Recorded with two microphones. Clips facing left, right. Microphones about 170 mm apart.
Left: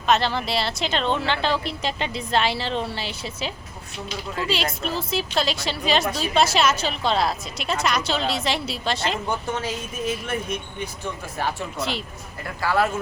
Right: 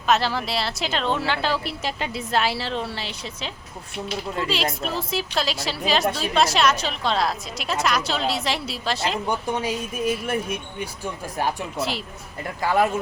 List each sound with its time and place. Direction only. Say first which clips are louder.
0.0 s speech: even; 5° right (ahead or behind)
9.3 s speech: right 2 dB; 15° right (ahead or behind)
11.8 s speech: even; centre (ahead or behind)
12.6 s speech: right 1 dB; 15° right (ahead or behind)